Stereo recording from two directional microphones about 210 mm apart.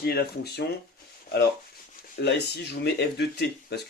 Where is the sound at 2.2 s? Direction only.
55° left (ahead or behind).